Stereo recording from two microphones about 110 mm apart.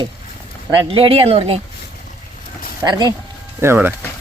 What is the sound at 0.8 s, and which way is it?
Speech, 55° right (ahead or behind).